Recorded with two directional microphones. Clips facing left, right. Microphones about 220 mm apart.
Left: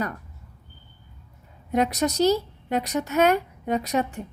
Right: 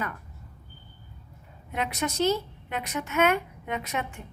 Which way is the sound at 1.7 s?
40° left (ahead or behind).